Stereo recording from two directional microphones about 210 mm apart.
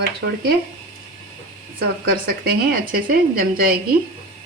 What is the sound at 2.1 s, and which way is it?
Speech, 45° right (ahead or behind).